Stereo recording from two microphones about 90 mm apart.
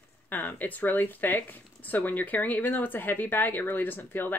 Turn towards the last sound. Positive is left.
turn(degrees=25)  # may be behind; listen again after turning